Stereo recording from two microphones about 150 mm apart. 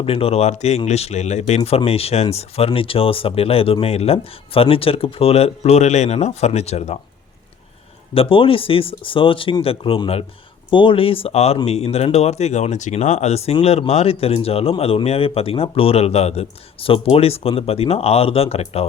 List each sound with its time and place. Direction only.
0.0 s speech: 40° left (ahead or behind)
8.1 s speech: 40° left (ahead or behind)